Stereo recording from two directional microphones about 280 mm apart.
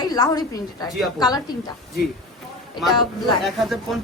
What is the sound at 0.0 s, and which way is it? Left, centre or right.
Speech, centre.